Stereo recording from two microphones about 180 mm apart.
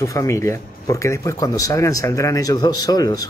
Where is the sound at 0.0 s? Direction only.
15° left (ahead or behind).